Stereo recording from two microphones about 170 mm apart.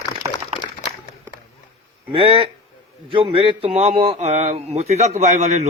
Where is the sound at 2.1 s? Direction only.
35° right (ahead or behind).